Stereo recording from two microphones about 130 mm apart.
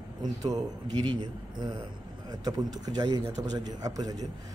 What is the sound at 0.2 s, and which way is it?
A man's voice, 30° right (ahead or behind).